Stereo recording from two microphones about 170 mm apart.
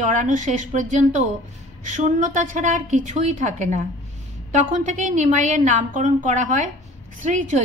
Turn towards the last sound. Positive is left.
turn(degrees=-50)  # may be behind; listen again after turning